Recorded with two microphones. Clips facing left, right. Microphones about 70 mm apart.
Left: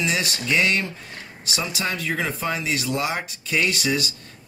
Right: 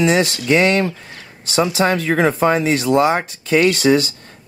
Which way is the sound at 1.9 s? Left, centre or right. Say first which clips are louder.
Right 10 dB; right.